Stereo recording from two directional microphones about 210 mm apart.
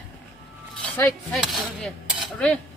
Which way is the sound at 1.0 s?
Centre (ahead or behind).